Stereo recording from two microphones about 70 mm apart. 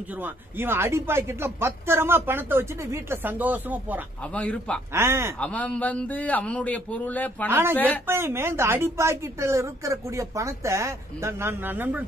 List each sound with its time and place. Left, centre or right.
0.2 s a woman's voice: right
3.3 s speech: right
4.3 s a man's voice: centre
4.9 s a woman's voice: right
5.4 s a man's voice: centre
7.4 s a woman's voice: right
7.7 s a man's voice: left
8.1 s a woman's voice: right